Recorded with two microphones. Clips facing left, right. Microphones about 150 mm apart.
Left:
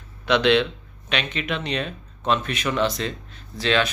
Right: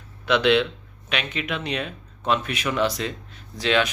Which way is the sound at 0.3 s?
5° right (ahead or behind).